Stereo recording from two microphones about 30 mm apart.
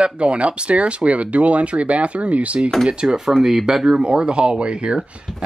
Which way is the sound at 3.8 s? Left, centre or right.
Right.